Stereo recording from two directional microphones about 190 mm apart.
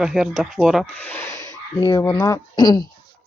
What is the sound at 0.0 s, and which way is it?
Speech, centre (ahead or behind).